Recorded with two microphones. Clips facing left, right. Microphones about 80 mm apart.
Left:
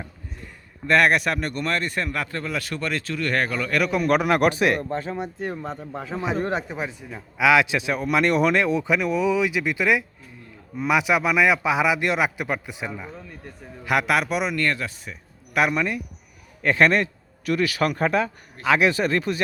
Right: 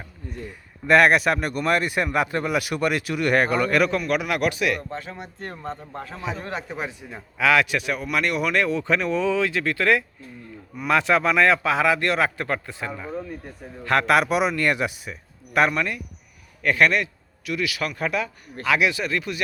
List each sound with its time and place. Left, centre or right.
0.9 s a man's voice: centre
4.0 s a man's voice: left
5.4 s a man's voice: centre
6.1 s a man's voice: centre
6.3 s a man's voice: left
6.7 s a man's voice: centre
7.3 s a man's voice: centre
8.1 s a man's voice: left
8.5 s a man's voice: centre
14.7 s a man's voice: centre
15.7 s a man's voice: centre
16.6 s a man's voice: left